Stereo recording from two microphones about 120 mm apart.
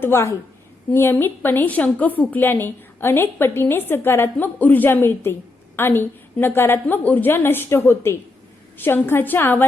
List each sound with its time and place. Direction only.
0.0 s a woman's voice: 20° left (ahead or behind)